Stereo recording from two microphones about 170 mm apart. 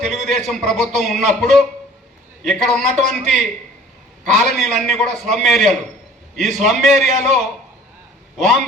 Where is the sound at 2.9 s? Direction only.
45° right (ahead or behind).